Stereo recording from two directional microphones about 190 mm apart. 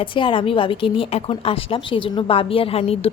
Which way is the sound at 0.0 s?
25° left (ahead or behind).